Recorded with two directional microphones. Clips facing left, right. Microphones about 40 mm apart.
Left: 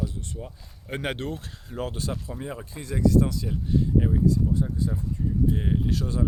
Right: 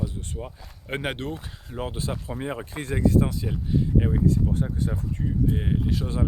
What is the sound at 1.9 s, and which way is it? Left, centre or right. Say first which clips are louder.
Speech: right 3 dB; right.